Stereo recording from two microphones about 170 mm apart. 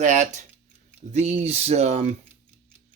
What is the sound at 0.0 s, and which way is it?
Speech, 45° right (ahead or behind).